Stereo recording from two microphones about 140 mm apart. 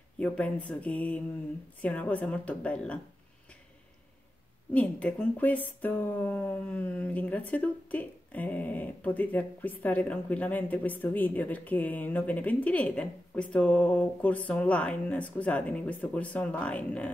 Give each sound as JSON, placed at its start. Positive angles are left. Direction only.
{"t": 0.2, "sound": "speech", "side_deg": 10}
{"t": 4.7, "sound": "speech", "side_deg": 10}